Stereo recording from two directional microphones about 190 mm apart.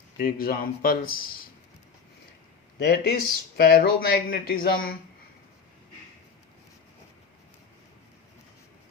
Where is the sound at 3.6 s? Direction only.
50° left (ahead or behind).